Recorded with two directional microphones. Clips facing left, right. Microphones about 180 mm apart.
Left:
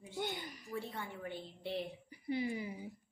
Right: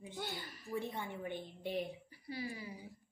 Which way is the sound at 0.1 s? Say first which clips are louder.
Left 5 dB; 20° left (ahead or behind).